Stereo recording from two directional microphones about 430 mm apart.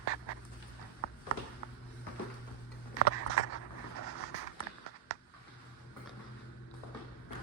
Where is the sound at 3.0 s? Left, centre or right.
Centre.